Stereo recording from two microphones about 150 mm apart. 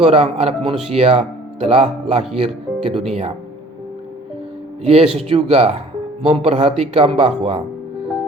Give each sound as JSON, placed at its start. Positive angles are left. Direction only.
{"t": 0.0, "sound": "speech", "side_deg": -40}
{"t": 4.8, "sound": "speech", "side_deg": -40}